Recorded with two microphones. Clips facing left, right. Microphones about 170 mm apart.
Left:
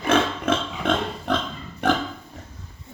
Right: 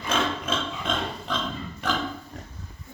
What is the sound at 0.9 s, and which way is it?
Pig, 65° left (ahead or behind).